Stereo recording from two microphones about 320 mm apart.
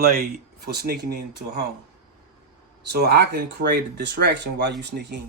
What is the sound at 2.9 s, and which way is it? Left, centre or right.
Speech, right.